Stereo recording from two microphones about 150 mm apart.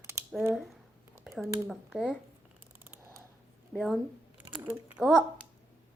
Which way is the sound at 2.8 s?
15° right (ahead or behind).